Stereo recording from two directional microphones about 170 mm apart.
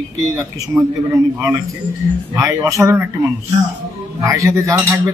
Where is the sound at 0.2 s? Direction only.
15° right (ahead or behind).